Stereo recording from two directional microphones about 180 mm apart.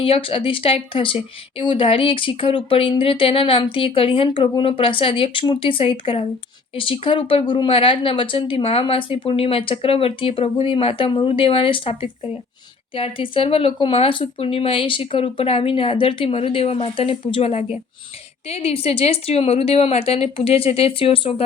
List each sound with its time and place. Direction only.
0.0 s speech: 30° left (ahead or behind)